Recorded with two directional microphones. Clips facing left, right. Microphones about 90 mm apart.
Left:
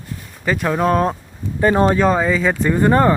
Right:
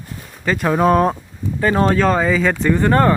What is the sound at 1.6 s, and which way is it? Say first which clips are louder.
Speech: left 1 dB; 20° left (ahead or behind).